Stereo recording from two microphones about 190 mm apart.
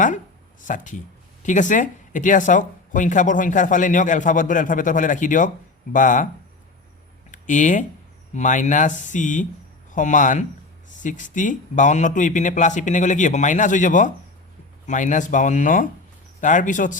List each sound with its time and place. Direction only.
0.7 s speech: 40° left (ahead or behind)
7.3 s a sound: 40° left (ahead or behind)
8.3 s speech: 40° left (ahead or behind)